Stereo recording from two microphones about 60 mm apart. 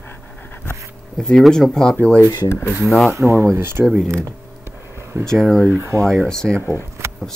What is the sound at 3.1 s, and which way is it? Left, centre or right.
Speech, right.